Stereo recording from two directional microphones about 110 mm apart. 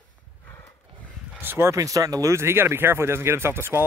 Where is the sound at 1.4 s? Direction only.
20° right (ahead or behind).